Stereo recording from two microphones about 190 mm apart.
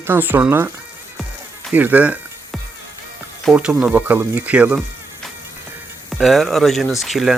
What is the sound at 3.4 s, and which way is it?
Speech, 5° right (ahead or behind).